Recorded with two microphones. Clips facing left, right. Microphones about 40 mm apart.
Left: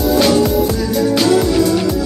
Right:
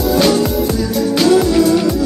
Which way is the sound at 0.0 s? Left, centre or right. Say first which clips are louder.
Left 1 dB; centre.